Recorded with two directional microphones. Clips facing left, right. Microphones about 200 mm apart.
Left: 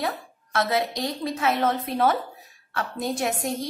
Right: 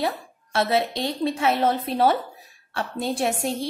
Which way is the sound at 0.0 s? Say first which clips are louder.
Right 3 dB; 30° right (ahead or behind).